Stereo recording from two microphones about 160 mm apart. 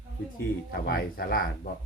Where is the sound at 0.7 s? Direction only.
70° left (ahead or behind).